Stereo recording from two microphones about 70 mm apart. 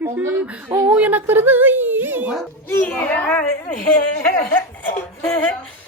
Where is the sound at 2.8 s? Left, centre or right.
Centre.